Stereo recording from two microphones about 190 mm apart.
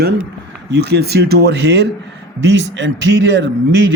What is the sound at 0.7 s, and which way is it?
A man's voice, 60° right (ahead or behind).